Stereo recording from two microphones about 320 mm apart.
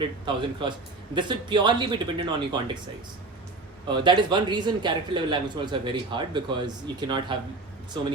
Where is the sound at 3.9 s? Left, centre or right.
Centre.